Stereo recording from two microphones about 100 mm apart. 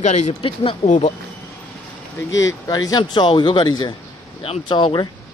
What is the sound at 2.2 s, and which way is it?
Speech, 35° left (ahead or behind).